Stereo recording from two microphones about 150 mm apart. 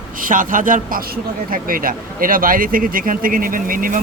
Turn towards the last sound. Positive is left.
turn(degrees=-70)  # may be behind; listen again after turning